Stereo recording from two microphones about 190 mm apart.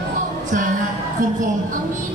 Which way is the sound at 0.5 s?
45° right (ahead or behind).